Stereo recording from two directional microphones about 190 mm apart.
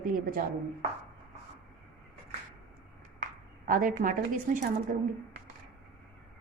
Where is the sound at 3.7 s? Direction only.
45° right (ahead or behind).